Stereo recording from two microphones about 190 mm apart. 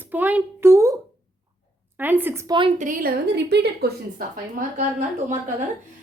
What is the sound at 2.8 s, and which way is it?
Speech, 50° right (ahead or behind).